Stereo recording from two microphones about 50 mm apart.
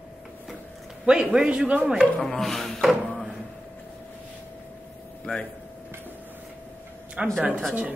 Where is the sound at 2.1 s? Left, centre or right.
Centre.